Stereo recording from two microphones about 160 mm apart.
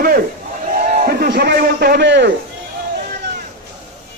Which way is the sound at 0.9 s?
50° right (ahead or behind).